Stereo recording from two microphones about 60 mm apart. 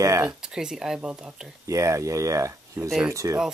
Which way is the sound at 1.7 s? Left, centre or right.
Right.